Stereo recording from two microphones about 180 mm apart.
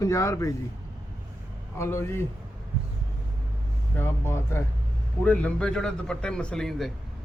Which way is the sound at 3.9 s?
15° left (ahead or behind).